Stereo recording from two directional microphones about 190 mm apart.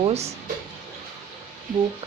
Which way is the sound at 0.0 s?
35° right (ahead or behind).